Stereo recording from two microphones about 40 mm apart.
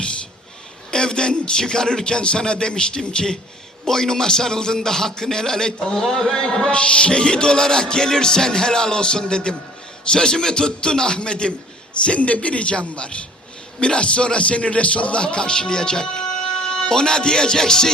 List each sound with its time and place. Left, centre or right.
0.9 s music: centre
3.8 s a man's voice: centre
6.7 s music: left
13.7 s a man's voice: left